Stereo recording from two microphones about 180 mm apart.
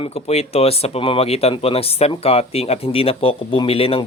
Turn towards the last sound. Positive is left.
turn(degrees=30)  # may be behind; listen again after turning